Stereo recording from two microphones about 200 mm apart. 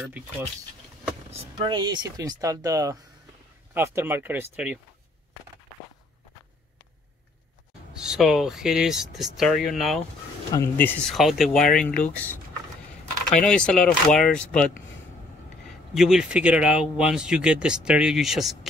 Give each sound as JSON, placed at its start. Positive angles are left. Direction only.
{"t": 1.3, "sound": "speech", "side_deg": -25}
{"t": 8.0, "sound": "speech", "side_deg": -5}
{"t": 10.5, "sound": "speech", "side_deg": 10}
{"t": 11.1, "sound": "speech", "side_deg": 0}
{"t": 13.4, "sound": "speech", "side_deg": 5}
{"t": 15.9, "sound": "speech", "side_deg": 0}